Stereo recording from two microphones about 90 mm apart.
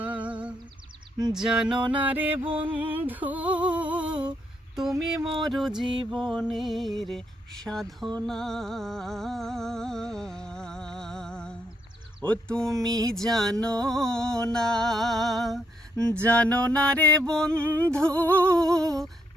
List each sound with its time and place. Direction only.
0.1 s music: 15° right (ahead or behind)
2.4 s music: 85° right
2.7 s music: 20° right (ahead or behind); by 15.6 s centre (ahead or behind)
16.0 s music: 15° left (ahead or behind)